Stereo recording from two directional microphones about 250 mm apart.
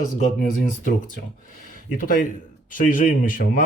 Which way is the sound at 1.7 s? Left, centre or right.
Left.